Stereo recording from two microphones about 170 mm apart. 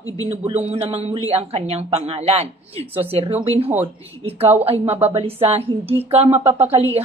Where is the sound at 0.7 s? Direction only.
40° right (ahead or behind).